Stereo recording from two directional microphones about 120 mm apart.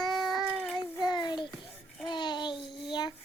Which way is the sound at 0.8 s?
35° left (ahead or behind).